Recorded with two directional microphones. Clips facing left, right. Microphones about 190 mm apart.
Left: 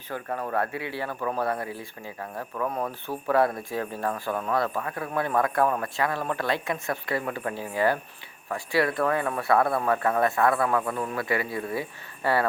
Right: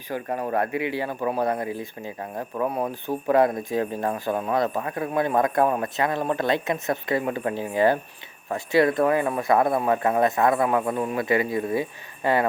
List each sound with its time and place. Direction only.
0.1 s speech: 15° right (ahead or behind)